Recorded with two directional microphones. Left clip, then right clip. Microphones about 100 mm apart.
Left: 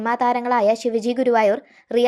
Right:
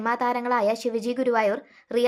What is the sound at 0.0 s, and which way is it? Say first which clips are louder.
A woman's voice: left 5 dB; 40° left (ahead or behind).